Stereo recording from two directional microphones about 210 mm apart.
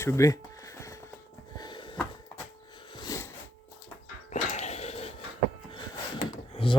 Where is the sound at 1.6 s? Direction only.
20° left (ahead or behind).